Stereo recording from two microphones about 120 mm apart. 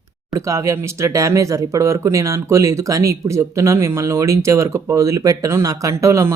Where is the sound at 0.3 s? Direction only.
25° right (ahead or behind).